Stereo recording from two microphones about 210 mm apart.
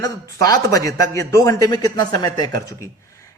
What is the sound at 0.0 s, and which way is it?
A man's voice, 15° left (ahead or behind).